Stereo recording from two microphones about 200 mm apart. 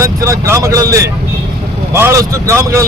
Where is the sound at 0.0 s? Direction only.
15° right (ahead or behind).